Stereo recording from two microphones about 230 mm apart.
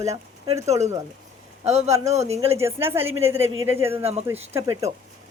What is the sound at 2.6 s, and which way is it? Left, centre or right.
A woman's voice, centre.